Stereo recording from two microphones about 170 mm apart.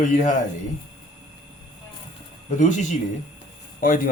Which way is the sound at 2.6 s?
45° left (ahead or behind).